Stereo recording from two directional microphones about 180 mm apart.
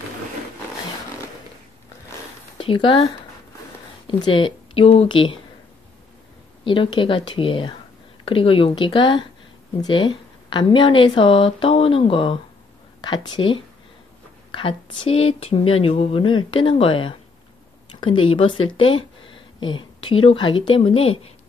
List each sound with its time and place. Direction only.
2.5 s speech: 30° left (ahead or behind)
4.1 s speech: 30° left (ahead or behind)
6.6 s speech: 30° left (ahead or behind)